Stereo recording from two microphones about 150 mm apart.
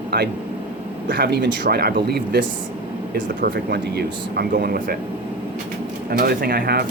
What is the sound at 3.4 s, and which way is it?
Speech, 90° right.